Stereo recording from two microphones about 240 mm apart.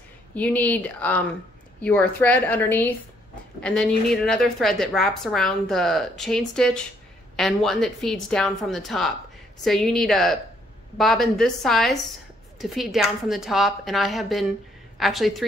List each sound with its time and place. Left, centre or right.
0.3 s a woman's voice: centre